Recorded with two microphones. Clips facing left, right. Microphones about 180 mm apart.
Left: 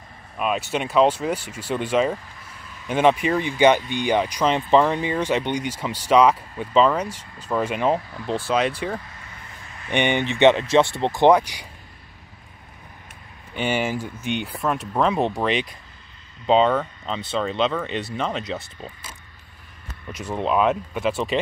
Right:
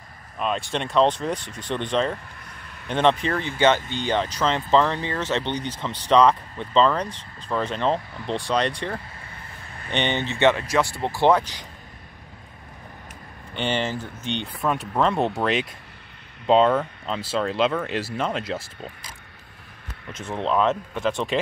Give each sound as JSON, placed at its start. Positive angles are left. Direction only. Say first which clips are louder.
{"t": 0.4, "sound": "speech", "louder": "left 2 dB", "side_deg": 5}
{"t": 13.6, "sound": "speech", "louder": "left 2 dB", "side_deg": 10}
{"t": 20.2, "sound": "speech", "louder": "left 1 dB", "side_deg": 10}